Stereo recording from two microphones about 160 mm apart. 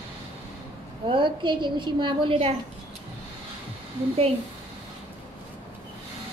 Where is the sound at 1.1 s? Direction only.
30° right (ahead or behind).